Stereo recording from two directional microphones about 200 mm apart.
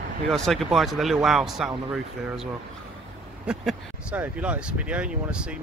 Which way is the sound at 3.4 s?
5° right (ahead or behind).